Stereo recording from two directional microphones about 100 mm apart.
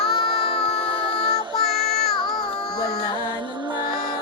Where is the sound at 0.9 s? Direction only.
50° right (ahead or behind).